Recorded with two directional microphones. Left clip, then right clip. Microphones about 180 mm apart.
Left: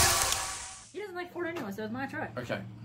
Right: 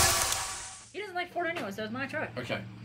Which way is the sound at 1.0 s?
55° left (ahead or behind).